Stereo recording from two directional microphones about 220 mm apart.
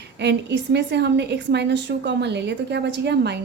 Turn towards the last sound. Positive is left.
turn(degrees=-50)  # may be behind; listen again after turning